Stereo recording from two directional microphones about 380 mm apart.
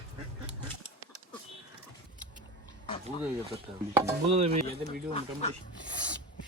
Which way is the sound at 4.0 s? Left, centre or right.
Centre.